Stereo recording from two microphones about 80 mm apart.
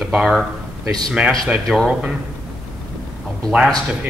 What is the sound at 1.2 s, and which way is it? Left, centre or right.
Speech, centre.